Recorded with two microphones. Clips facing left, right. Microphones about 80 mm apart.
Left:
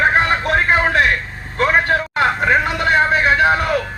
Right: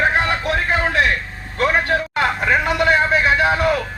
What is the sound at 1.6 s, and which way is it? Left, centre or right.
Vehicle, left.